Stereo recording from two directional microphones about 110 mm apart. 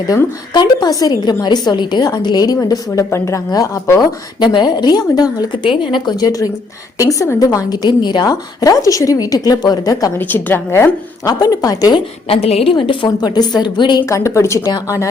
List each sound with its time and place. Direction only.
0.1 s a woman's voice: 40° left (ahead or behind)
4.4 s a woman's voice: 40° left (ahead or behind)
10.2 s a woman's voice: 15° left (ahead or behind)
11.3 s a woman's voice: 35° left (ahead or behind)
12.3 s a woman's voice: 65° left (ahead or behind)
12.7 s a woman's voice: 50° left (ahead or behind)
14.0 s a woman's voice: 25° left (ahead or behind)